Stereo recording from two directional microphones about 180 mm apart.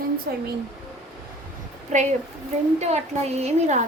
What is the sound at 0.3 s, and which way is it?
Speech, 55° right (ahead or behind).